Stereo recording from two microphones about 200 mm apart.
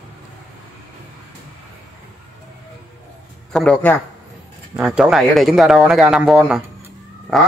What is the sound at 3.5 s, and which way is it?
A man's voice, 5° left (ahead or behind).